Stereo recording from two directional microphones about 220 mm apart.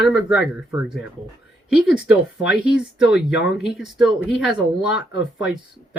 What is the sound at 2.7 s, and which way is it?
Speech, 50° left (ahead or behind).